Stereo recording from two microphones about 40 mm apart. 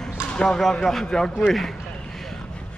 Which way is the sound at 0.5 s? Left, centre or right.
Centre.